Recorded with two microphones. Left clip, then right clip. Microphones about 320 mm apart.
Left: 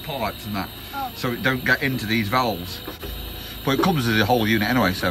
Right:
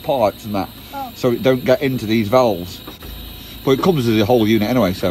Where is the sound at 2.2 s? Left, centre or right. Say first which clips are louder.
Right 8 dB; centre.